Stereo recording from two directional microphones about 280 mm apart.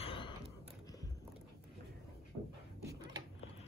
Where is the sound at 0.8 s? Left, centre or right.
Centre.